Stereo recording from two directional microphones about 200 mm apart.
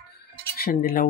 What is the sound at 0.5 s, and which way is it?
Wind chime, 50° left (ahead or behind).